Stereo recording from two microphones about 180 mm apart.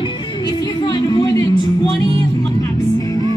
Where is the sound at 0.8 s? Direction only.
25° left (ahead or behind).